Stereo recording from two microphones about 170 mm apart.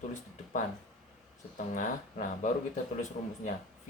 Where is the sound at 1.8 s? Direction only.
45° left (ahead or behind).